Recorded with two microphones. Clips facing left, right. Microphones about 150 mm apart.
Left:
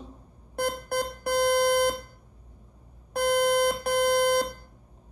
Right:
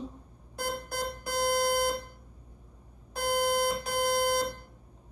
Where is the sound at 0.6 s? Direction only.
60° left (ahead or behind).